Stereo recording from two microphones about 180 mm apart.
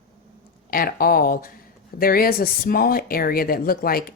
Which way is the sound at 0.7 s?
55° left (ahead or behind).